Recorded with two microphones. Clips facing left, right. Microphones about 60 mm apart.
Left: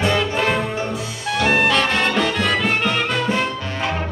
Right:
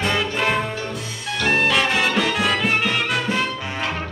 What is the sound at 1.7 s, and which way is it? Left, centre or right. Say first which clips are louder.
Music: left 1 dB; centre.